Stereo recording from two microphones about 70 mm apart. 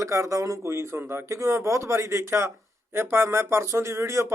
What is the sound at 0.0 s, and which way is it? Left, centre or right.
Speech, right.